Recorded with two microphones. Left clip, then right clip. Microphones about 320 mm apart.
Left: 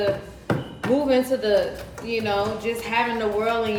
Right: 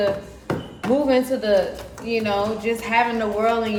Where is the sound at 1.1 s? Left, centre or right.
Centre.